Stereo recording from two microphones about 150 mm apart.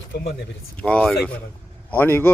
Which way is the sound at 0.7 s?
5° left (ahead or behind).